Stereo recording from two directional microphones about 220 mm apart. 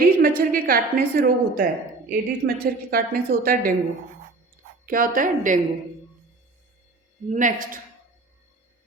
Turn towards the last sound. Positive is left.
turn(degrees=-35)  # may be behind; listen again after turning